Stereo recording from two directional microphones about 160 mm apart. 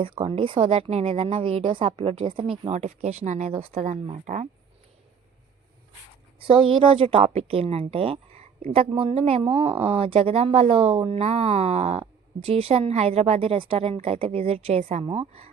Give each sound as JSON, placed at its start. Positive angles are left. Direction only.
{"t": 0.0, "sound": "speech", "side_deg": -35}
{"t": 6.4, "sound": "speech", "side_deg": -30}